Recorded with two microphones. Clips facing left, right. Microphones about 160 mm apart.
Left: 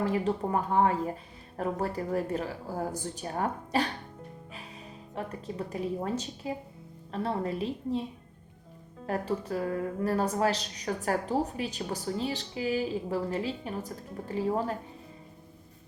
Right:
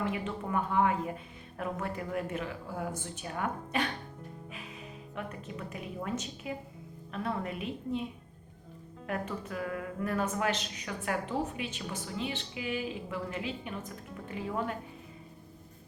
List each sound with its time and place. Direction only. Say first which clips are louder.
0.0 s a woman's voice: left 6 dB; 35° left (ahead or behind)
5.1 s a woman's voice: left 5 dB; 35° left (ahead or behind)
9.0 s a woman's voice: left 5 dB; 35° left (ahead or behind)